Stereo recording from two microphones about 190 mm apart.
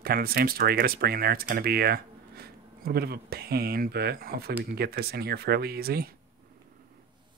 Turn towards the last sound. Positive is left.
turn(degrees=-55)  # may be behind; listen again after turning